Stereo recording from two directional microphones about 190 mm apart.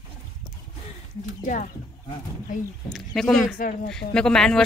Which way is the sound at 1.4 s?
45° left (ahead or behind).